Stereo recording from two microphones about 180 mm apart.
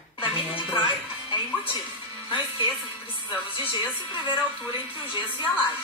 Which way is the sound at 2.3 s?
25° left (ahead or behind).